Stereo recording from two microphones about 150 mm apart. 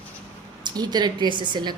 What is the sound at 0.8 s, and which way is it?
Speech, 30° right (ahead or behind).